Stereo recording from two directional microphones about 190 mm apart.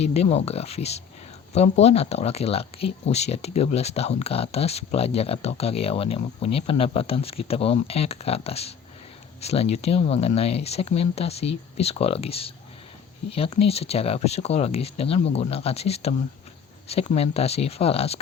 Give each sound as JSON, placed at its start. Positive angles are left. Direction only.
{"t": 0.0, "sound": "speech", "side_deg": 35}